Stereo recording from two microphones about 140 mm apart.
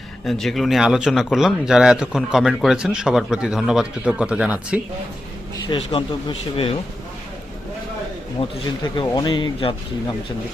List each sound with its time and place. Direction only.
0.3 s speech: centre (ahead or behind)
5.6 s speech: 35° left (ahead or behind)
8.4 s speech: 40° left (ahead or behind)